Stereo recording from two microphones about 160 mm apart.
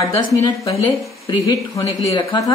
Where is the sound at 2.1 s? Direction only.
20° left (ahead or behind).